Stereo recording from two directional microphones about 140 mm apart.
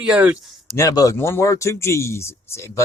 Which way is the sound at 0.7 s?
25° left (ahead or behind).